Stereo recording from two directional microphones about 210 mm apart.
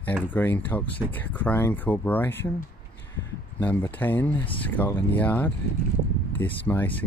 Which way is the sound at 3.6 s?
10° left (ahead or behind).